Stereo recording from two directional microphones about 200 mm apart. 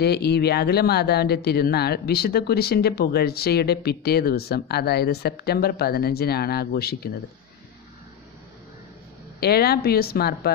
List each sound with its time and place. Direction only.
0.0 s speech: 55° left (ahead or behind)
9.4 s speech: 50° left (ahead or behind)